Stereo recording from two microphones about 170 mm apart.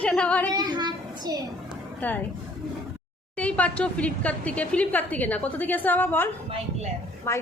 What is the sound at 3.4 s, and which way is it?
A woman's voice, 10° left (ahead or behind).